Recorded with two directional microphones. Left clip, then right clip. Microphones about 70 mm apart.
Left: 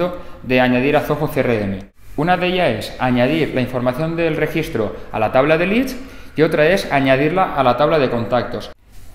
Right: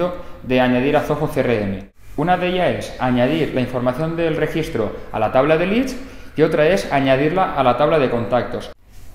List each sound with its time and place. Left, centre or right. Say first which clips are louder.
0.0 s speech: left 1 dB; left